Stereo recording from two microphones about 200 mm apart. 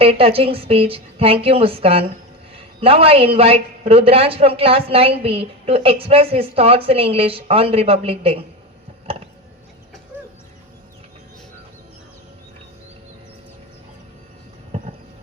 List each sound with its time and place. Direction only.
0.0 s a woman's voice: 30° right (ahead or behind)